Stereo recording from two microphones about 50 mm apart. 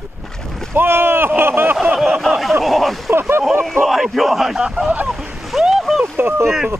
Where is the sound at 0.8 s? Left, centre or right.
Right.